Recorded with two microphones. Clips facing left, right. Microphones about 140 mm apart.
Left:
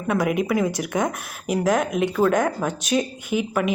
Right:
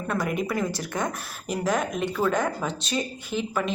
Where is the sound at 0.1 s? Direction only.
10° left (ahead or behind).